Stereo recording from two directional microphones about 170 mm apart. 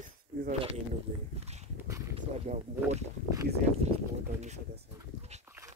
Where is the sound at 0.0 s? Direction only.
50° right (ahead or behind).